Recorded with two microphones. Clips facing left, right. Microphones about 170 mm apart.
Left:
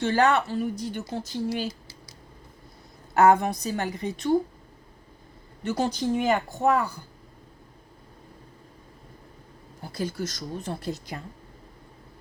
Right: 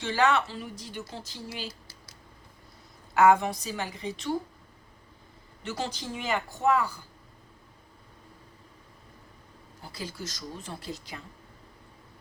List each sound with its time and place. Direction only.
0.0 s speech: 55° left (ahead or behind)
3.2 s speech: 50° left (ahead or behind)
5.6 s speech: 45° left (ahead or behind)
9.8 s speech: 55° left (ahead or behind)